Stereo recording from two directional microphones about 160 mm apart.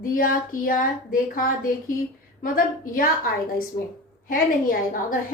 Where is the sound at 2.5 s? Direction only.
60° left (ahead or behind).